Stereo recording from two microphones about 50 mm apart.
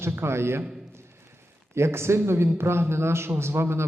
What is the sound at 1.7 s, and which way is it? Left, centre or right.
A man's voice, right.